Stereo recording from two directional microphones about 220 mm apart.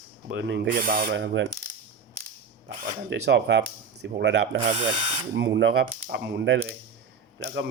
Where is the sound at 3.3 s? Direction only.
50° right (ahead or behind).